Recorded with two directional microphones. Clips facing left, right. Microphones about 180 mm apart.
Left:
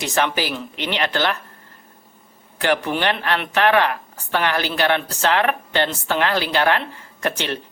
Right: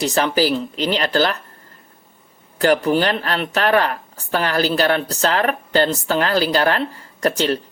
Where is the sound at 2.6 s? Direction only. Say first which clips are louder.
Right 5 dB; 40° right (ahead or behind).